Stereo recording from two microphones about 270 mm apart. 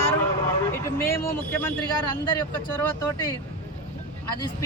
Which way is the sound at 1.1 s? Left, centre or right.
Centre.